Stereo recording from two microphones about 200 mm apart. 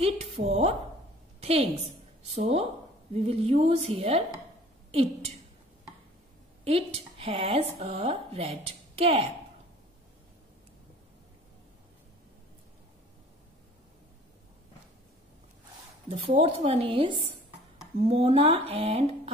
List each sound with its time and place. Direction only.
0.0 s a woman's voice: 30° right (ahead or behind)
6.6 s speech: 30° right (ahead or behind)
16.1 s speech: 30° right (ahead or behind)